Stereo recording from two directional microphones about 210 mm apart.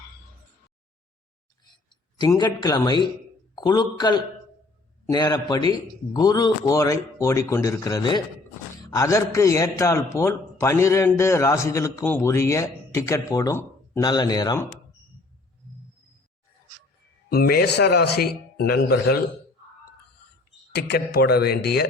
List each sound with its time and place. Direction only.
2.1 s a man's voice: 20° left (ahead or behind)
17.2 s a man's voice: 45° left (ahead or behind)
20.7 s a man's voice: 50° left (ahead or behind)